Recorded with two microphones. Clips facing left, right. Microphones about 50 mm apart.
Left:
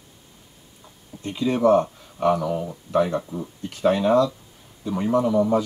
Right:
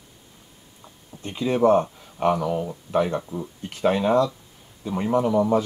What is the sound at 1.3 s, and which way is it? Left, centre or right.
Speech, centre.